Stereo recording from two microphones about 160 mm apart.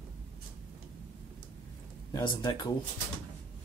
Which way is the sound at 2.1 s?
30° left (ahead or behind).